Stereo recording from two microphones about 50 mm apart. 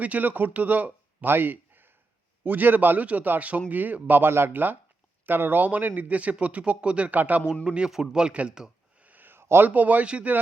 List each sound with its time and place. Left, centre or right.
0.0 s a man's voice: right
1.3 s a sound: right
2.4 s a man's voice: right
4.1 s a man's voice: right
7.6 s speech: right
7.9 s a man's voice: centre
8.2 s speech: right
9.0 s a sound: right
9.4 s a sound: right
9.6 s a man's voice: right